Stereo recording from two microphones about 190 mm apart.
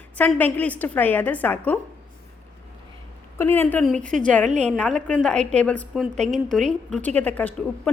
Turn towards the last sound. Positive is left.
turn(degrees=10)  # may be behind; listen again after turning